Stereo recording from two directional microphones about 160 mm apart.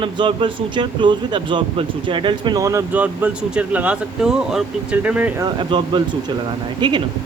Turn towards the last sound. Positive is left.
turn(degrees=-30)  # may be behind; listen again after turning